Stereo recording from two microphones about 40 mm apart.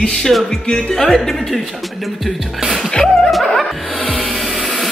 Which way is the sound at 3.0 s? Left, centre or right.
Centre.